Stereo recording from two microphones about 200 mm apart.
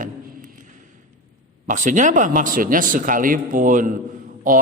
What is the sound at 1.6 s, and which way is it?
A man's voice, 40° right (ahead or behind).